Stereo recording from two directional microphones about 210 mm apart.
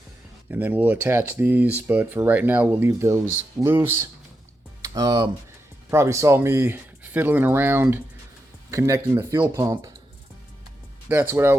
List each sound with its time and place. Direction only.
0.5 s speech: 10° right (ahead or behind)
11.1 s speech: 10° right (ahead or behind)